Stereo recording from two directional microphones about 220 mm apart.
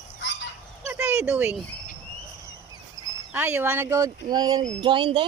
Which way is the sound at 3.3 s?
10° right (ahead or behind).